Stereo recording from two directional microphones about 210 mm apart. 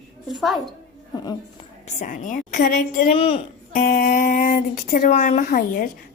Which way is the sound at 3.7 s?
45° left (ahead or behind).